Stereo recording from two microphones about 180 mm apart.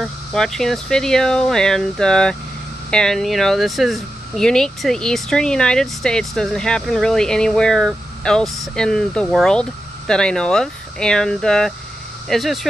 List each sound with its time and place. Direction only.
0.0 s speech: centre (ahead or behind)